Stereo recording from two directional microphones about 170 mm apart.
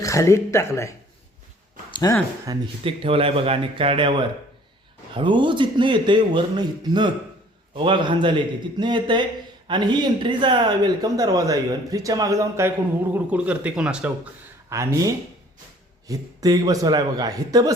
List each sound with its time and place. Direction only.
0.0 s speech: 20° left (ahead or behind)
2.5 s speech: 30° right (ahead or behind); by 14.1 s 5° right (ahead or behind)
14.7 s speech: 20° right (ahead or behind)